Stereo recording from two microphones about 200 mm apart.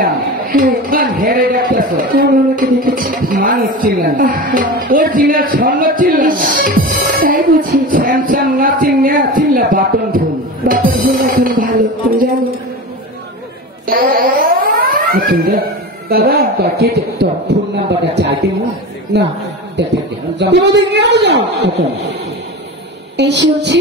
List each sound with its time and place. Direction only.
0.0 s a man's voice: 45° right (ahead or behind)
10.7 s music: 45° right (ahead or behind)
13.8 s a sound: 45° right (ahead or behind)
16.1 s speech: 50° right (ahead or behind)
19.8 s a man's voice: 60° right (ahead or behind)
23.1 s a man's voice: 60° right (ahead or behind)